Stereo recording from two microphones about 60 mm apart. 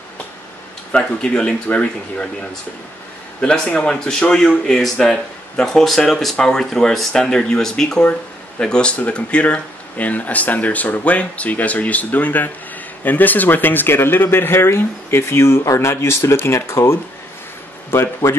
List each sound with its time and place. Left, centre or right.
0.9 s speech: centre
3.3 s speech: centre; by 18.4 s left